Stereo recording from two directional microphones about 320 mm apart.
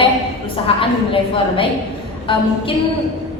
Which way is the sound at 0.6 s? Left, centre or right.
Centre.